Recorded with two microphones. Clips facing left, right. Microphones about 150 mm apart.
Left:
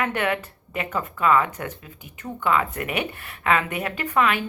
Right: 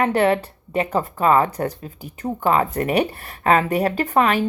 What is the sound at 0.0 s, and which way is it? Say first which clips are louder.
A woman's voice: right 7 dB; 35° right (ahead or behind).